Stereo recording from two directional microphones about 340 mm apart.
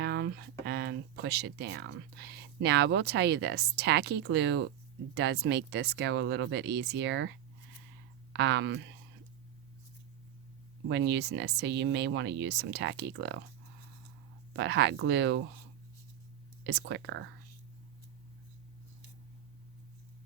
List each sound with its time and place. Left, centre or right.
0.0 s speech: right
10.8 s speech: right
14.5 s speech: right
16.6 s speech: right